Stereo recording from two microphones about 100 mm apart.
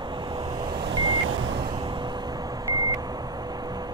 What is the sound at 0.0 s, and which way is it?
Vehicle, 50° right (ahead or behind).